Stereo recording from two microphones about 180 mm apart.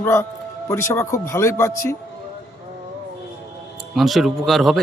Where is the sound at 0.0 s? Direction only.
15° left (ahead or behind).